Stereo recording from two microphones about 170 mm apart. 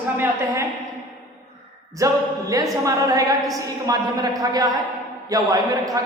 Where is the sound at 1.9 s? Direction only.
20° right (ahead or behind).